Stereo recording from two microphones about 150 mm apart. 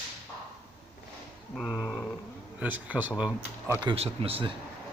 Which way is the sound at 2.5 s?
10° right (ahead or behind).